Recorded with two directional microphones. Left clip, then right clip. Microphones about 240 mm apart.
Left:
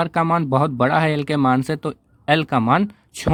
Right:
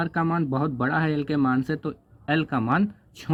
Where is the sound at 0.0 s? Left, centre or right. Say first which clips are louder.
Left 7 dB; left.